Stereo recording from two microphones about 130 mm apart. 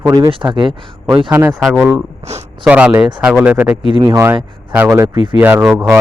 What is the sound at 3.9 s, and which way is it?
A man's voice, 30° right (ahead or behind).